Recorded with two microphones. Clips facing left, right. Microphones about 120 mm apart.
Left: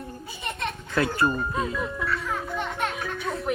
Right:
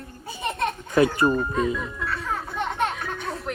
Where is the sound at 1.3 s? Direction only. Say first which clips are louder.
Right 4 dB; 5° left (ahead or behind).